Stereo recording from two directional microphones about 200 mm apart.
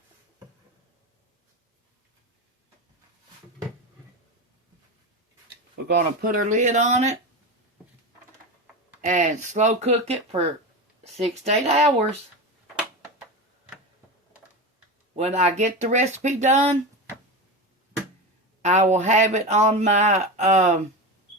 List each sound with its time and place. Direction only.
5.7 s speech: 50° right (ahead or behind)
9.0 s speech: 35° right (ahead or behind)
15.1 s speech: 35° right (ahead or behind)
18.6 s speech: 35° right (ahead or behind)